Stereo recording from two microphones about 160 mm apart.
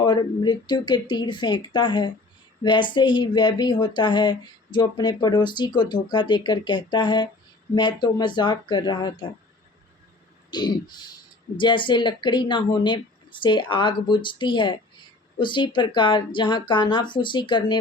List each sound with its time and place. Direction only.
0.0 s speech: 25° left (ahead or behind)
10.5 s speech: 25° left (ahead or behind)